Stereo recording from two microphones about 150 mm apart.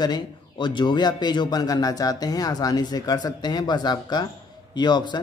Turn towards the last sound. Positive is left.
turn(degrees=30)  # may be behind; listen again after turning